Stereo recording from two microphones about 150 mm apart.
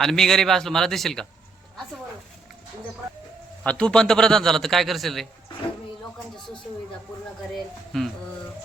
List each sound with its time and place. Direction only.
0.0 s a man's voice: centre (ahead or behind)
3.6 s a man's voice: 5° left (ahead or behind)
7.5 s a man's voice: centre (ahead or behind)